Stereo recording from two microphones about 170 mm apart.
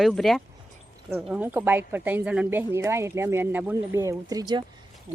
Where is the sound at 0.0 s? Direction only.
Centre (ahead or behind).